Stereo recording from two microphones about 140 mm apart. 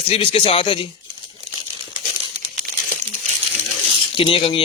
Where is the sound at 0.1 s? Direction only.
40° left (ahead or behind).